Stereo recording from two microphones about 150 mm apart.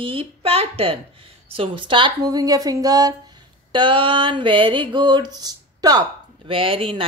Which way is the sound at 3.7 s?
35° right (ahead or behind).